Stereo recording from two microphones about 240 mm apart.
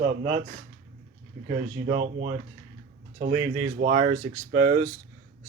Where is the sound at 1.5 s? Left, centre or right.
Right.